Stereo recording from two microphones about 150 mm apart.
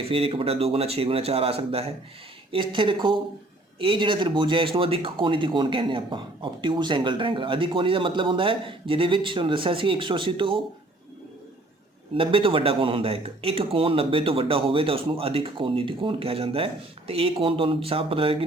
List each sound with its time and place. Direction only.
0.1 s speech: 40° right (ahead or behind)
12.1 s speech: 35° right (ahead or behind)